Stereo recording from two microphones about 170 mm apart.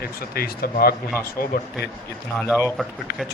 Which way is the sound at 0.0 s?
60° left (ahead or behind).